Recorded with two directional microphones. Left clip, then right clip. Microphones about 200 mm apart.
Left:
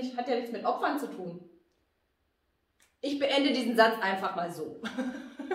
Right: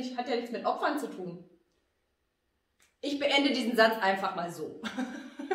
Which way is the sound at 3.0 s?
20° right (ahead or behind).